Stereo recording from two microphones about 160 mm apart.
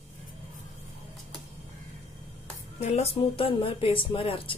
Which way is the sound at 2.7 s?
40° left (ahead or behind).